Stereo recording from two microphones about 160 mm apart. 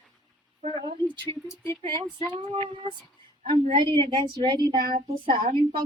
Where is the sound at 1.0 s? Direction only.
10° left (ahead or behind).